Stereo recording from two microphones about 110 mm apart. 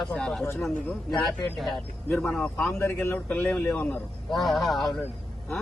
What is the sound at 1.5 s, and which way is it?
A man's voice, centre (ahead or behind).